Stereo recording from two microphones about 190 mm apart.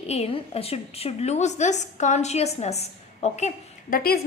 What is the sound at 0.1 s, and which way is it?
A woman's voice, 35° left (ahead or behind).